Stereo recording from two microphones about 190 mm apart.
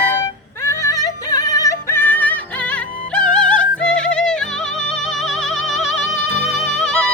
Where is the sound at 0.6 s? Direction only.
15° left (ahead or behind).